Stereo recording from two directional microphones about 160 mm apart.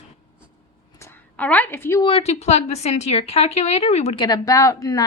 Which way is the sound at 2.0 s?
40° left (ahead or behind).